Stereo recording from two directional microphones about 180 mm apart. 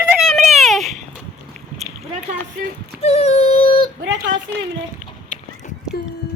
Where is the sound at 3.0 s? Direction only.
35° left (ahead or behind).